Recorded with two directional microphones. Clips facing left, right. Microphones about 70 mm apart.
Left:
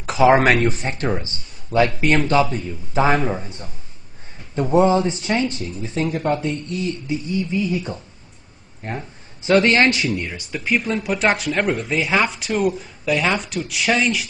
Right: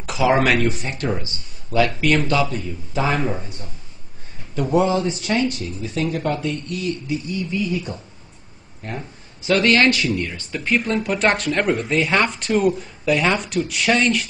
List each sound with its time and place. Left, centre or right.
0.0 s speech: left; by 14.2 s centre